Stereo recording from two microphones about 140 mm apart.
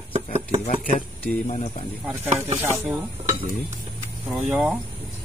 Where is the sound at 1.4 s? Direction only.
45° left (ahead or behind).